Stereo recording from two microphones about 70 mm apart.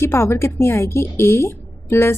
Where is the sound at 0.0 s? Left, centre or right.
Left.